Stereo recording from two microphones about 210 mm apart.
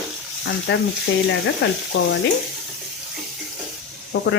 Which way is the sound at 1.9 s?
60° left (ahead or behind).